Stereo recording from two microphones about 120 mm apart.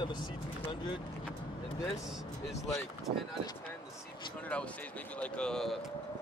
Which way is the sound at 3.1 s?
60° right (ahead or behind).